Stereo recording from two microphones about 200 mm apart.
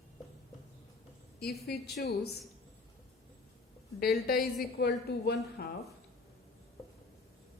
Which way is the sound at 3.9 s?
50° left (ahead or behind).